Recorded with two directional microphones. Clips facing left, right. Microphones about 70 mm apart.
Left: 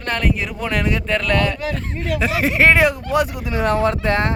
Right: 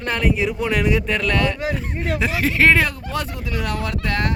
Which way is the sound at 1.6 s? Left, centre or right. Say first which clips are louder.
Even; centre.